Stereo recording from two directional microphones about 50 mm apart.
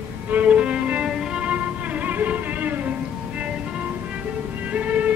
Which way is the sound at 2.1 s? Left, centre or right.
Right.